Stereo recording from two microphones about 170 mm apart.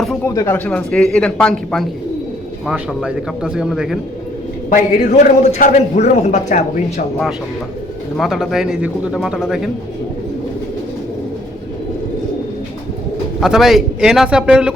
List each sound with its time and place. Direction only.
0.3 s speech: 15° left (ahead or behind); by 3.9 s 5° right (ahead or behind)
4.7 s a man's voice: 45° left (ahead or behind)
8.1 s speech: centre (ahead or behind)
13.4 s speech: centre (ahead or behind)